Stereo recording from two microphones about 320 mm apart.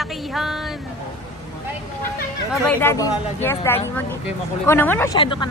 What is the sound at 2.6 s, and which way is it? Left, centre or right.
Speech, centre.